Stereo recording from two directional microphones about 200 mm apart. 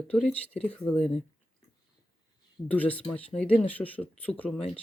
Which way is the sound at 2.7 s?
5° left (ahead or behind).